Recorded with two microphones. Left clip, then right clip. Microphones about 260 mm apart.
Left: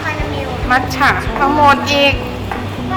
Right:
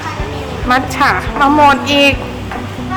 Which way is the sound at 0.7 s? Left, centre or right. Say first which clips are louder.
Right 1 dB; right.